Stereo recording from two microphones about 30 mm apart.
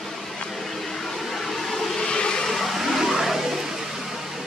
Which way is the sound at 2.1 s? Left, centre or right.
Left.